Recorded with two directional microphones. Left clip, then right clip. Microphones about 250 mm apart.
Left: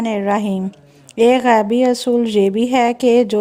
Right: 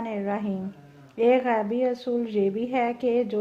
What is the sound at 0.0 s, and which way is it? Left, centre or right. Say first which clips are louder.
A woman's voice: left 11 dB; left.